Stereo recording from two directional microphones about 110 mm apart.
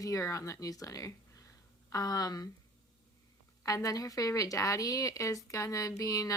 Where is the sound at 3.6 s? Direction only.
35° left (ahead or behind).